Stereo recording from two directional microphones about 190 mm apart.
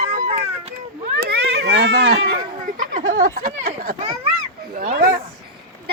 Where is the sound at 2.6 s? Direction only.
45° right (ahead or behind).